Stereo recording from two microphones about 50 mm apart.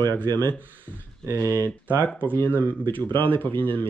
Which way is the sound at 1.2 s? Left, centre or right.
Right.